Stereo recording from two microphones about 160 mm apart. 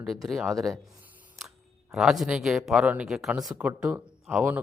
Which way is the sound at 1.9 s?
Centre (ahead or behind).